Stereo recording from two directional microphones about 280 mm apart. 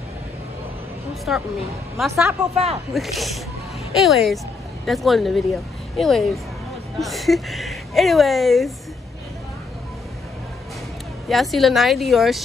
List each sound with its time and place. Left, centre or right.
1.3 s speech: centre
2.5 s speech: right
2.9 s speech: centre
11.2 s speech: centre